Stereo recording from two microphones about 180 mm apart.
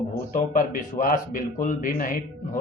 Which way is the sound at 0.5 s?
50° left (ahead or behind).